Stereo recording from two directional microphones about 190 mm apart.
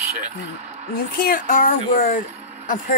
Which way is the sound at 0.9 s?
50° left (ahead or behind).